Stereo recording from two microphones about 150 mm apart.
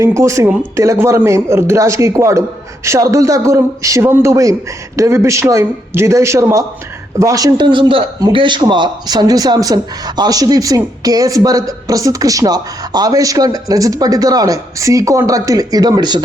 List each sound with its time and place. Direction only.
0.0 s speech: 20° right (ahead or behind)